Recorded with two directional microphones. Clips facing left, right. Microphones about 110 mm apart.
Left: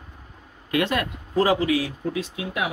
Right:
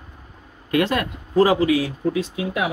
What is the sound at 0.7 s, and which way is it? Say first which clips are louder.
Speech: right 3 dB; 35° right (ahead or behind).